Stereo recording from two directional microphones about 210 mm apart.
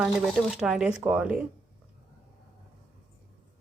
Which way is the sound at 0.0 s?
Centre (ahead or behind).